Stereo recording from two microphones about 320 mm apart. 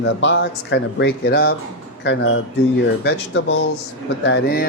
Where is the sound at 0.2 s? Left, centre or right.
Left.